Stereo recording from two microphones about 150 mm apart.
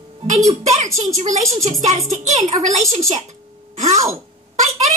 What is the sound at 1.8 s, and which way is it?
Speech, 50° right (ahead or behind).